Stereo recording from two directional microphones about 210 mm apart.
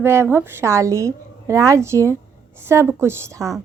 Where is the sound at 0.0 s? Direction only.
10° right (ahead or behind).